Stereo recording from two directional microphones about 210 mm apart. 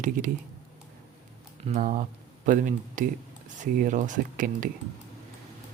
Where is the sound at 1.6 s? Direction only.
35° right (ahead or behind).